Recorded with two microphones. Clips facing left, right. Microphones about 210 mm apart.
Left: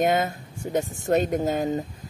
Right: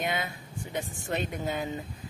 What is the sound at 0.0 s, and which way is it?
Speech, 45° left (ahead or behind).